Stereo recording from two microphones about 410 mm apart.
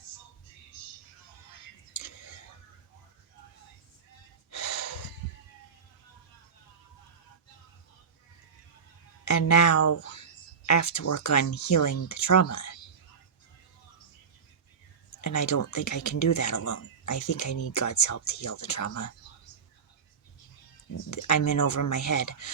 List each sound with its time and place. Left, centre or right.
1.9 s whispering: left
4.5 s snort: left
9.2 s speech: left
15.2 s speech: left
21.1 s speech: left